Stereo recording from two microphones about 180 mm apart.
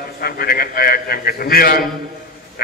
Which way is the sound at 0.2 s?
55° left (ahead or behind).